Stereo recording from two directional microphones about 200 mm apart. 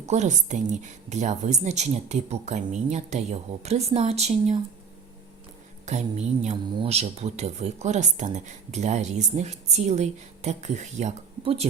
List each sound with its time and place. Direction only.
0.0 s speech: 35° right (ahead or behind)
5.8 s speech: 35° right (ahead or behind)